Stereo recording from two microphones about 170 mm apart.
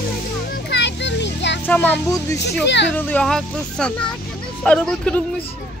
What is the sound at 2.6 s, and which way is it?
Speech, 90° left.